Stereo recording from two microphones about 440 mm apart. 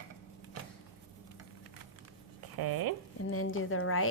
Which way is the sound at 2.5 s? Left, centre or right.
Right.